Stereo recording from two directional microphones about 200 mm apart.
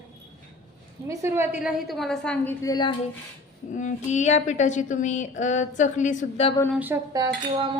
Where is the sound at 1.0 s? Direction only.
10° right (ahead or behind); by 2.9 s 20° left (ahead or behind).